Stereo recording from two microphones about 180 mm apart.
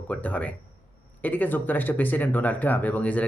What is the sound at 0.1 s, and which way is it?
Speech, 10° left (ahead or behind).